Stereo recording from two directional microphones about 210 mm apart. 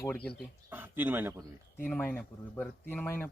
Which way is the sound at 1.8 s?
5° left (ahead or behind).